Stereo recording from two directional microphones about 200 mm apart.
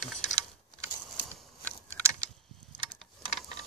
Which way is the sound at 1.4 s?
10° left (ahead or behind).